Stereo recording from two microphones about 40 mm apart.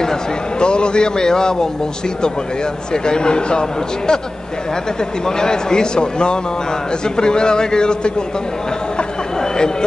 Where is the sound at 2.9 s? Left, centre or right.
Centre.